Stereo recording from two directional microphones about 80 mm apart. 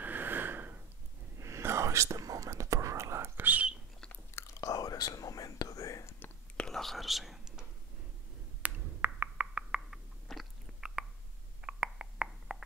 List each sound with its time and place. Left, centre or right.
0.0 s a sound: right
1.4 s whispering: right
4.4 s whispering: left
6.0 s whispering: left
6.5 s whispering: centre
8.6 s a sound: centre
9.5 s frog: centre
10.2 s biting: centre
11.6 s a sound: centre